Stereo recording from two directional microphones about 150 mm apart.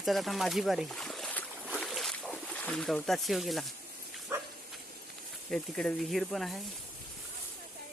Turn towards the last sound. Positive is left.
turn(degrees=0)  # may be behind; listen again after turning